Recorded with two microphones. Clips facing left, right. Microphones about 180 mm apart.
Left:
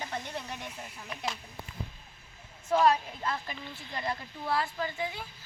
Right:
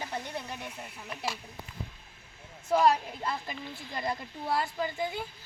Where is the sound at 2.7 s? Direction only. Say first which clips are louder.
Even; 10° right (ahead or behind).